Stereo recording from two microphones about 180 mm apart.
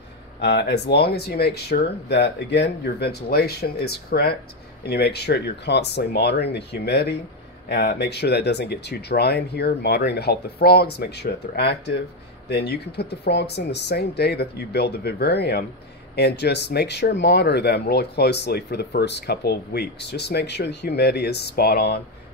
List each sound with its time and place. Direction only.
0.4 s speech: 65° left (ahead or behind)